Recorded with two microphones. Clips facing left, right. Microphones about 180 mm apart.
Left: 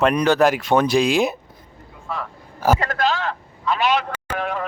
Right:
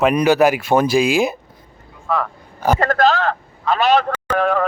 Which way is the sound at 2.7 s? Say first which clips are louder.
Right 6 dB; 45° right (ahead or behind).